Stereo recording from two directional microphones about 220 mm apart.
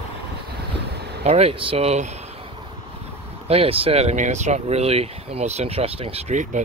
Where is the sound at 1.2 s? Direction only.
30° right (ahead or behind).